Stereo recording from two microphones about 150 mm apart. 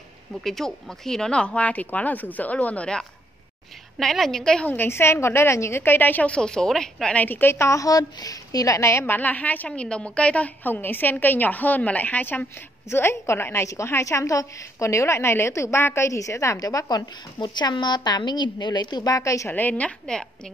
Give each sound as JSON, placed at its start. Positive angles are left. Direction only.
{"t": 0.4, "sound": "a woman's voice", "side_deg": 0}